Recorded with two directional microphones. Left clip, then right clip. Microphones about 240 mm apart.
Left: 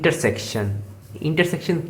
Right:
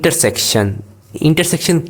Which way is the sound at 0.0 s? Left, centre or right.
Right.